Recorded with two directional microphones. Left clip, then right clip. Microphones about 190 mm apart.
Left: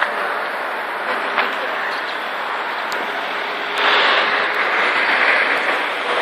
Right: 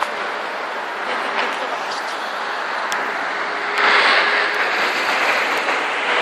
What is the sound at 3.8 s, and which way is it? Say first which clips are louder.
Vehicle: right 1 dB; 45° left (ahead or behind).